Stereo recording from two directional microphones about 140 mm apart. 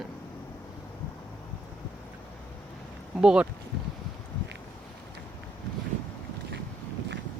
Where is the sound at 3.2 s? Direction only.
5° right (ahead or behind).